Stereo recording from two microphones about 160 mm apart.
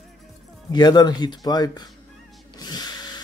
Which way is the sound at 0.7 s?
25° left (ahead or behind).